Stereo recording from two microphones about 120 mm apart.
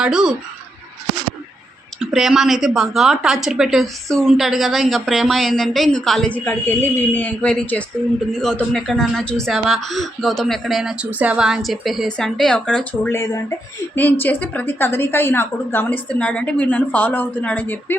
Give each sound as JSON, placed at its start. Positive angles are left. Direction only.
{"t": 0.0, "sound": "speech", "side_deg": -5}
{"t": 2.0, "sound": "speech", "side_deg": -5}
{"t": 13.1, "sound": "a woman's voice", "side_deg": 25}